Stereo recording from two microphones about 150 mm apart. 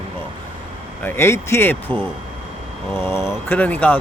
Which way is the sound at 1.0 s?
15° left (ahead or behind).